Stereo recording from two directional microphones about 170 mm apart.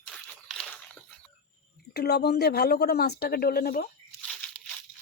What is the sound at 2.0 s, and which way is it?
Speech, 70° left (ahead or behind).